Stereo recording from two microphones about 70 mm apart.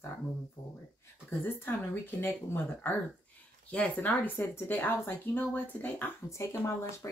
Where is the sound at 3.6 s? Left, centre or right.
Centre.